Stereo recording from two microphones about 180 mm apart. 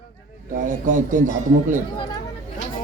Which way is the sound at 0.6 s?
45° right (ahead or behind).